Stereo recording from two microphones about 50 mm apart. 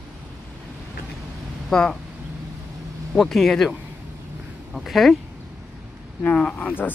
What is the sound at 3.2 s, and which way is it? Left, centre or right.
Speech, centre.